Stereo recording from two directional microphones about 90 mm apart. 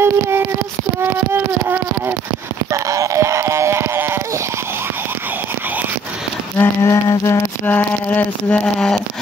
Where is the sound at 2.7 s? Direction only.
35° right (ahead or behind); by 5.8 s 20° right (ahead or behind).